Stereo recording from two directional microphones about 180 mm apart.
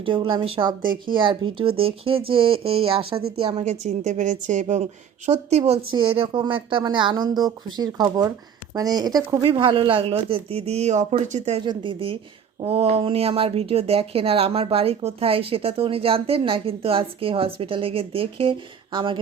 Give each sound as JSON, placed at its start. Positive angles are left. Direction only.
{"t": 0.0, "sound": "speech", "side_deg": -30}
{"t": 11.6, "sound": "speech", "side_deg": -25}